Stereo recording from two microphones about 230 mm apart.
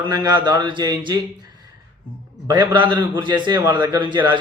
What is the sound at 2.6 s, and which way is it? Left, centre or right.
A man's voice, centre.